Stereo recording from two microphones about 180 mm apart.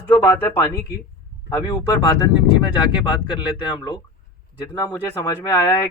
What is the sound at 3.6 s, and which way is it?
Speech, 25° left (ahead or behind).